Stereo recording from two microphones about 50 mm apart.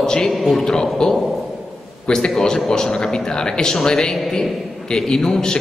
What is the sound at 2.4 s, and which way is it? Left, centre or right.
A man's voice, centre.